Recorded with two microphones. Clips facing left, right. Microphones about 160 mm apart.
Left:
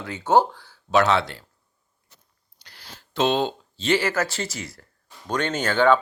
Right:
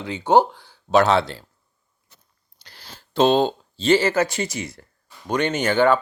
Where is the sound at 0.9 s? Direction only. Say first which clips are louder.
Right 3 dB; 35° right (ahead or behind).